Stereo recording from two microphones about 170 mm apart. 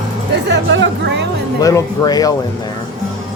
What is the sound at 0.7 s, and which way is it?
Speech, 90° right.